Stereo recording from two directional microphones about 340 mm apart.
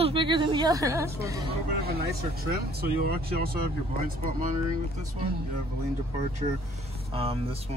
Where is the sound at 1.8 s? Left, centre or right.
Right.